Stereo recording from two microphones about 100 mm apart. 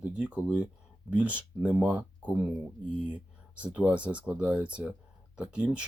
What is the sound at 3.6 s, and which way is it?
Speech, 15° right (ahead or behind).